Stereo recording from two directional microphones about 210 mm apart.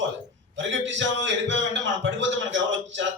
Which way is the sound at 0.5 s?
60° right (ahead or behind).